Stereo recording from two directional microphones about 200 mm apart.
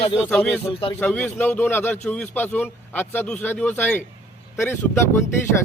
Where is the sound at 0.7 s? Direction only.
25° left (ahead or behind).